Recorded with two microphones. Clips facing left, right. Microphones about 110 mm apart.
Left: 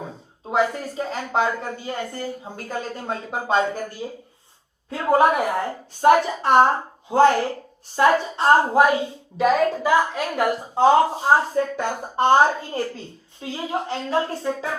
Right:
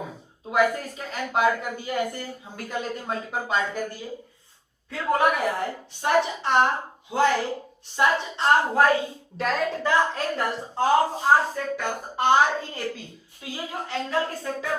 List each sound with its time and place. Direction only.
0.4 s a woman's voice: 25° left (ahead or behind)
7.3 s a woman's voice: 25° left (ahead or behind)
8.3 s a woman's voice: 40° left (ahead or behind)
8.5 s speech: 25° left (ahead or behind)
9.4 s speech: 5° left (ahead or behind)
10.8 s speech: 20° left (ahead or behind)
12.1 s a woman's voice: 35° left (ahead or behind)